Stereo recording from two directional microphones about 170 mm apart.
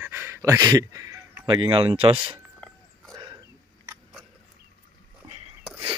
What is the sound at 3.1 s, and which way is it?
Wild animals, 25° right (ahead or behind).